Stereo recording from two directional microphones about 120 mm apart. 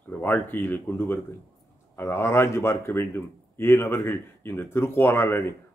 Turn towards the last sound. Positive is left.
turn(degrees=20)  # may be behind; listen again after turning